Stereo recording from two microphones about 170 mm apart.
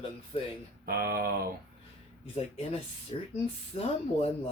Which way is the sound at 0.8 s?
60° right (ahead or behind).